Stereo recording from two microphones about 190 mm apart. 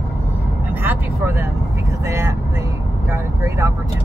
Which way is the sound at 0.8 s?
10° right (ahead or behind).